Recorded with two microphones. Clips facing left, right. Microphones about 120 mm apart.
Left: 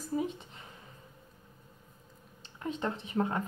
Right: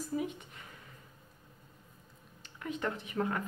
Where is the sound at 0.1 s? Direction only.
25° left (ahead or behind).